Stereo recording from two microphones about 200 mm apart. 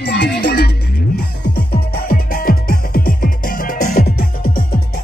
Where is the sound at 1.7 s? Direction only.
45° left (ahead or behind).